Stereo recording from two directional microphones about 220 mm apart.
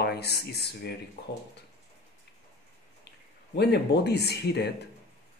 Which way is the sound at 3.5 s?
50° left (ahead or behind).